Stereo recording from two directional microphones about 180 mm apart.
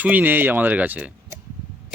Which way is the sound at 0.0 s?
10° right (ahead or behind).